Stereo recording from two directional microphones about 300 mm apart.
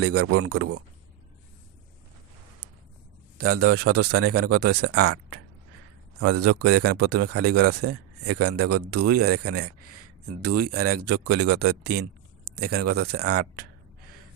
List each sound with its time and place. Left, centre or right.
0.0 s a man's voice: right
3.4 s a man's voice: right